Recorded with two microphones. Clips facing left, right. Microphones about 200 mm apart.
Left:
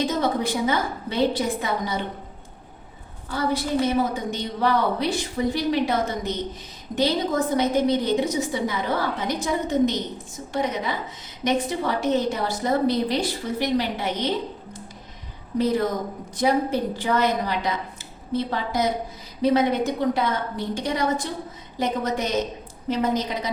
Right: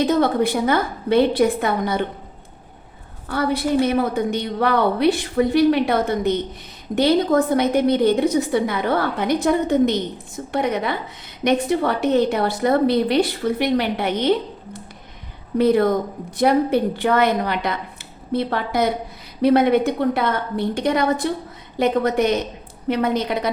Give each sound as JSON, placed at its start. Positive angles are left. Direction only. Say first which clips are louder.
{"t": 0.0, "sound": "a woman's voice", "louder": "right 6 dB", "side_deg": -60}
{"t": 3.2, "sound": "a woman's voice", "louder": "right 4 dB", "side_deg": -60}